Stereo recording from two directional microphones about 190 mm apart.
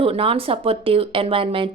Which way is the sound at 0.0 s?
30° right (ahead or behind).